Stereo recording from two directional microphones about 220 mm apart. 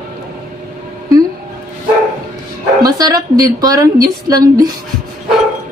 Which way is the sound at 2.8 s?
15° right (ahead or behind).